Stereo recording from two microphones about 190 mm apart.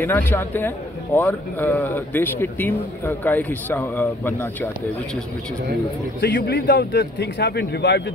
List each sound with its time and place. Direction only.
0.0 s a man's voice: 10° left (ahead or behind)
6.2 s a man's voice: 65° left (ahead or behind)